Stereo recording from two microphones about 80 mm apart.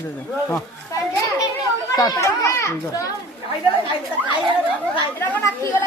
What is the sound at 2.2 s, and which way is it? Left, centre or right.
Speech, left.